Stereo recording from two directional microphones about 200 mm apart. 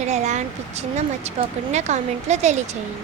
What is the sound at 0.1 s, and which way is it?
Speech, 35° right (ahead or behind).